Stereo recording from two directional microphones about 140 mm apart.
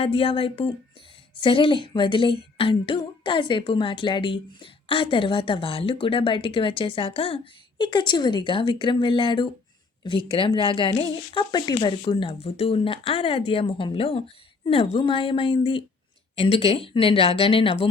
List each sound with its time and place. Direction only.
0.0 s speech: 40° left (ahead or behind)